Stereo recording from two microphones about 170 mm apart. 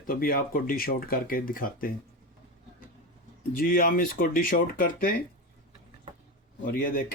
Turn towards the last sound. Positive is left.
turn(degrees=55)  # may be behind; listen again after turning